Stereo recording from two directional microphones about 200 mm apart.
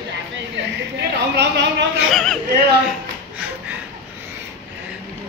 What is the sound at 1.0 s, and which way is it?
Speech, 60° right (ahead or behind).